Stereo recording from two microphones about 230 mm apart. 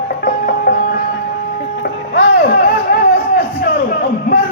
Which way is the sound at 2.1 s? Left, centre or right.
Left.